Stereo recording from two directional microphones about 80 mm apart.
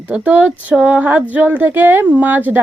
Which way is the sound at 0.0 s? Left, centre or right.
Centre.